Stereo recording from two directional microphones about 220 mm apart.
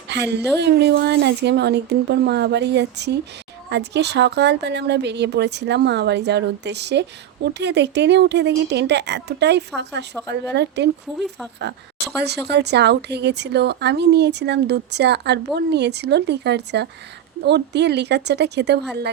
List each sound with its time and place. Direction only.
0.1 s speech: 50° right (ahead or behind)